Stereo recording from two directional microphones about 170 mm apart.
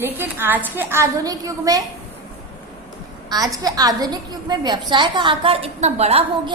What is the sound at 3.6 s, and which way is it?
A woman's voice, 20° right (ahead or behind).